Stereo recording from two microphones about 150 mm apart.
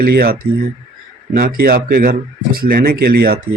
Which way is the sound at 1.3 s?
70° right (ahead or behind).